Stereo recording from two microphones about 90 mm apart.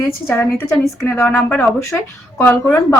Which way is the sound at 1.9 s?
10° left (ahead or behind).